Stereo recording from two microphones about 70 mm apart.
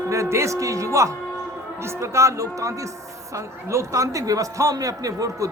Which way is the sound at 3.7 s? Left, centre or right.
Right.